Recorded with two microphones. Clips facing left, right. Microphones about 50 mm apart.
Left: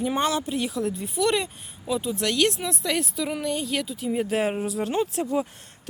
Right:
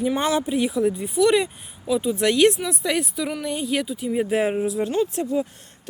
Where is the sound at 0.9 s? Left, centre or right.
Centre.